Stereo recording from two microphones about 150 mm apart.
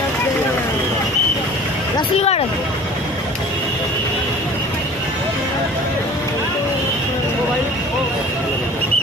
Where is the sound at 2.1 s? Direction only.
45° left (ahead or behind).